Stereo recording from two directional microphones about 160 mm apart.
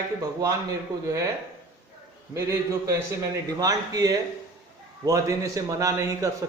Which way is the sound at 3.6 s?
25° right (ahead or behind).